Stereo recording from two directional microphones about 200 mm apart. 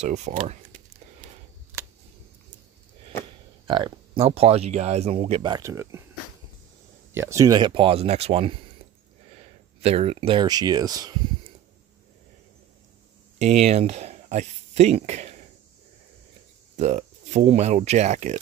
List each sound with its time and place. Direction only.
0.0 s speech: 35° right (ahead or behind)
3.6 s speech: 25° right (ahead or behind)
7.2 s speech: 15° right (ahead or behind); by 8.5 s 30° right (ahead or behind)
9.8 s speech: 30° right (ahead or behind)
13.4 s speech: 35° right (ahead or behind)
16.7 s speech: 35° right (ahead or behind)